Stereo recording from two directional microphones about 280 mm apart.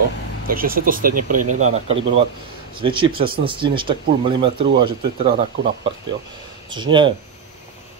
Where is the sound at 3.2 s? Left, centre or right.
Right.